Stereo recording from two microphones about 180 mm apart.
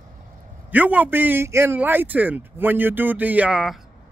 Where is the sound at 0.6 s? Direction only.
10° right (ahead or behind).